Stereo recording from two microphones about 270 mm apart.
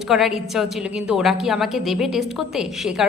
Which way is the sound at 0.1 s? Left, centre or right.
Centre.